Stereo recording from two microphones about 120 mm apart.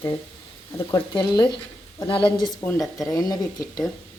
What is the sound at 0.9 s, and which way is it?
A woman's voice, 40° left (ahead or behind).